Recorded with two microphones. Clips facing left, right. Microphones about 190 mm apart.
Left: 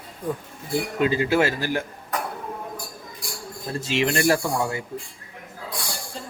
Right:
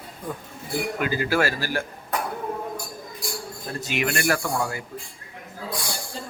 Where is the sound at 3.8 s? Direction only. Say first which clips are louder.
Left 4 dB; 25° left (ahead or behind).